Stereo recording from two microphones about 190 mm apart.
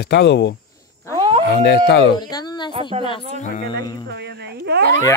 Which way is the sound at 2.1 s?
20° left (ahead or behind).